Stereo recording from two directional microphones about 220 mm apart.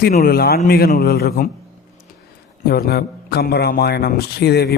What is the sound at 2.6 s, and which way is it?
A man's voice, 45° left (ahead or behind).